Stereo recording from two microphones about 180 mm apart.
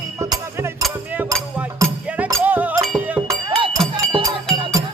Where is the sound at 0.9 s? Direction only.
10° right (ahead or behind).